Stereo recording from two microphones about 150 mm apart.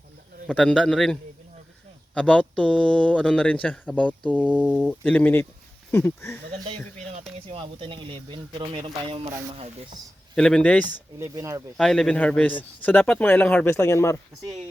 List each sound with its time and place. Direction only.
0.5 s speech: 5° left (ahead or behind)
6.7 s speech: 40° right (ahead or behind)
10.3 s speech: 5° left (ahead or behind)
11.2 s speech: 20° right (ahead or behind)
11.8 s speech: 5° left (ahead or behind)